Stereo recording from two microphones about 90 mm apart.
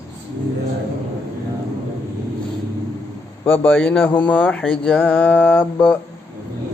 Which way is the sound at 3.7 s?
15° left (ahead or behind).